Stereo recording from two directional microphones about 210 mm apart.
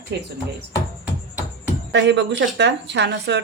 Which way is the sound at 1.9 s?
55° right (ahead or behind).